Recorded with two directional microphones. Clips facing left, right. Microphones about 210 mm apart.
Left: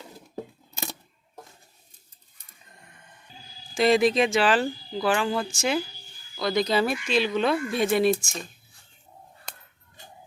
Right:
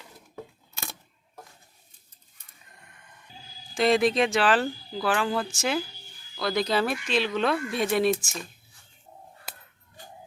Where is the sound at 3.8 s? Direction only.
Centre (ahead or behind).